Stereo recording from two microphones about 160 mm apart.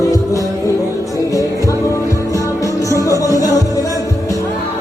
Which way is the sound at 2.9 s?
20° left (ahead or behind).